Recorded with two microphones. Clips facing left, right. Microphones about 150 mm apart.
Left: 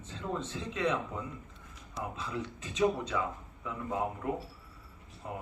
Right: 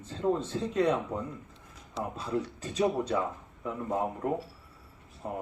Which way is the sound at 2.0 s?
40° right (ahead or behind).